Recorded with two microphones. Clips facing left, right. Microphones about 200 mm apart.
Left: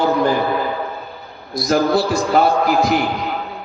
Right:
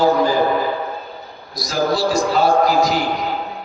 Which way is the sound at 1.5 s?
60° left (ahead or behind).